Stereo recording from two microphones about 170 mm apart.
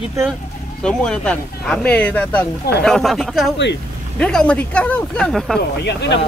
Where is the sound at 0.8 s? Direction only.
5° left (ahead or behind).